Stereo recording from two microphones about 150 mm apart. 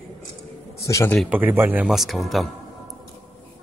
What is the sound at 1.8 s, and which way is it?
Speech, centre (ahead or behind).